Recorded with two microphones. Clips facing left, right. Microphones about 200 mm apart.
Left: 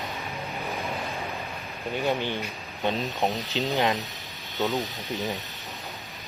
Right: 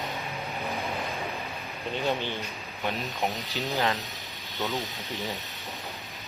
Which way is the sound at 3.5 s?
15° left (ahead or behind).